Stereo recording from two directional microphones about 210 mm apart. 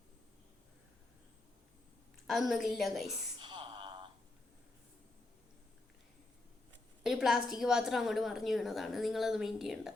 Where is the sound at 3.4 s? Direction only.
20° right (ahead or behind).